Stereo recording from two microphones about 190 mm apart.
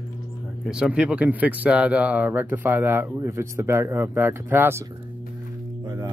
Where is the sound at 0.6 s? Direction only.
5° right (ahead or behind).